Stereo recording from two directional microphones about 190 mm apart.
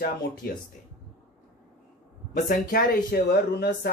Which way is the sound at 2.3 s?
50° left (ahead or behind).